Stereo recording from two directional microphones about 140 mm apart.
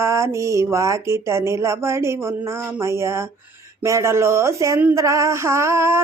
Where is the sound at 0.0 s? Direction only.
20° right (ahead or behind).